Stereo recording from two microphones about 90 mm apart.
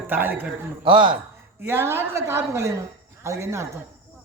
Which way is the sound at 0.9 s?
70° right (ahead or behind).